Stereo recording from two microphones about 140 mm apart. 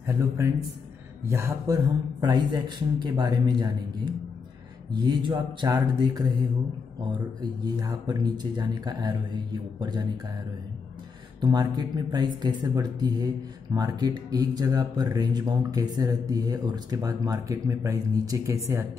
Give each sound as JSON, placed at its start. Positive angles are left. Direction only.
{"t": 0.0, "sound": "a man's voice", "side_deg": -20}
{"t": 7.6, "sound": "speech", "side_deg": -30}
{"t": 11.4, "sound": "speech", "side_deg": -30}